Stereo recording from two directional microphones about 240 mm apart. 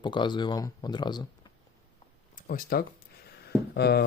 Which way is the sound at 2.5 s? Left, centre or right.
Left.